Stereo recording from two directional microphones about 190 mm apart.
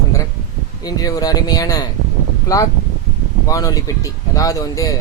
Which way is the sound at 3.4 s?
20° left (ahead or behind).